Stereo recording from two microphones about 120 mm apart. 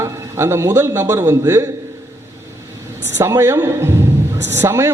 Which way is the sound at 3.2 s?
25° right (ahead or behind).